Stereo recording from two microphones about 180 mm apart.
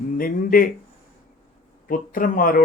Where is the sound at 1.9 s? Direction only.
50° left (ahead or behind).